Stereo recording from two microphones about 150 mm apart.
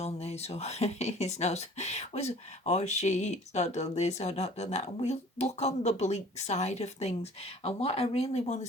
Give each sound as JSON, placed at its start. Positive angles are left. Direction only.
{"t": 0.0, "sound": "speech", "side_deg": 45}